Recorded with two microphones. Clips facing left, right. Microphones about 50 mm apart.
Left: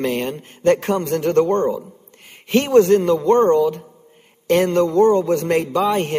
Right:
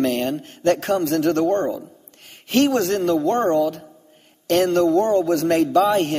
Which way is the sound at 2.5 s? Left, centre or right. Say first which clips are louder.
Left 5 dB; centre.